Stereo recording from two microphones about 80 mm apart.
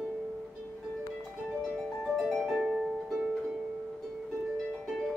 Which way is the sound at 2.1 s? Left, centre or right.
Centre.